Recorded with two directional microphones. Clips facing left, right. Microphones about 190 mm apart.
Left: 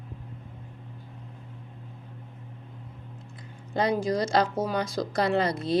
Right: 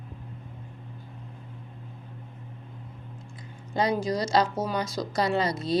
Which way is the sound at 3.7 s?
55° left (ahead or behind).